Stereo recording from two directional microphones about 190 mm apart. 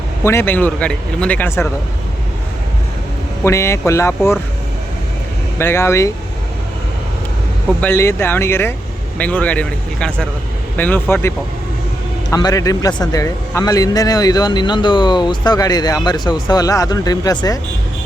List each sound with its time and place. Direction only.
0.3 s speech: 10° left (ahead or behind)
3.4 s speech: 15° left (ahead or behind)
5.5 s speech: 15° left (ahead or behind)
7.8 s a man's voice: 10° left (ahead or behind)